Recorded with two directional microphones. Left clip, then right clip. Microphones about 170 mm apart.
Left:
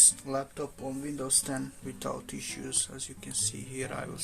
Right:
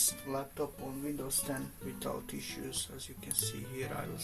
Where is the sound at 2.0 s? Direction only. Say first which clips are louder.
Left 3 dB; 45° left (ahead or behind).